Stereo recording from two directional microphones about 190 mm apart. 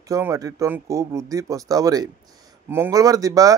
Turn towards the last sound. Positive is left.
turn(degrees=-20)  # may be behind; listen again after turning